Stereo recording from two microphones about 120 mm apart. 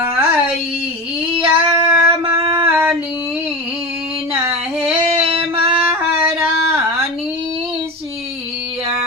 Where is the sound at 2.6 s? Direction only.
15° right (ahead or behind).